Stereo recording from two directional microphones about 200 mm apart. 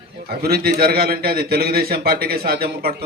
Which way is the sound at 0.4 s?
50° right (ahead or behind).